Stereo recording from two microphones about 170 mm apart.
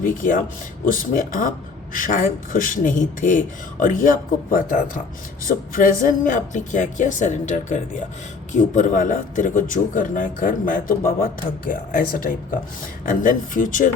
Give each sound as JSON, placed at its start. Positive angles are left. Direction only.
{"t": 0.0, "sound": "a man's voice", "side_deg": 50}